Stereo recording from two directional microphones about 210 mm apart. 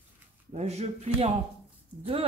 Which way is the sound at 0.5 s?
30° right (ahead or behind).